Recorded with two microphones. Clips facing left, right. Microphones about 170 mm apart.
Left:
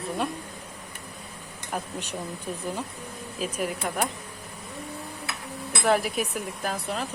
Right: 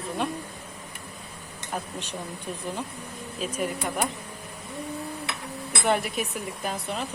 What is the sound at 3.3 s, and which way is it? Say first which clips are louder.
Speech: even; 5° left (ahead or behind).